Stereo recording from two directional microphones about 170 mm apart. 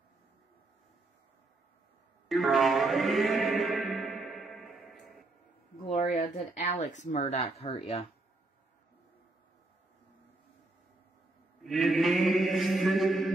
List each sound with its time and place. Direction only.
2.2 s mantra: centre (ahead or behind)
5.9 s speech: 45° left (ahead or behind)
11.6 s mantra: centre (ahead or behind)